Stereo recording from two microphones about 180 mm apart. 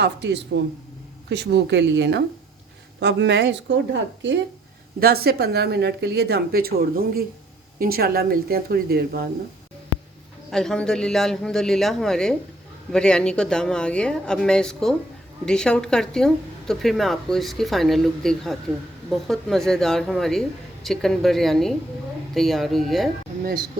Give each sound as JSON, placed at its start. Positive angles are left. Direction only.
{"t": 0.0, "sound": "a woman's voice", "side_deg": -75}
{"t": 4.9, "sound": "speech", "side_deg": -60}
{"t": 10.5, "sound": "a woman's voice", "side_deg": 5}